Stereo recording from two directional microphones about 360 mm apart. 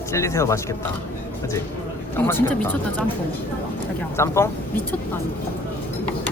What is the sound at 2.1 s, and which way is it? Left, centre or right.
Speech, centre.